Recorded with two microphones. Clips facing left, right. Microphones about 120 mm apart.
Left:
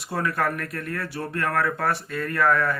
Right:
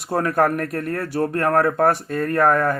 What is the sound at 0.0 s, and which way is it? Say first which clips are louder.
Speech: right 6 dB; 45° right (ahead or behind).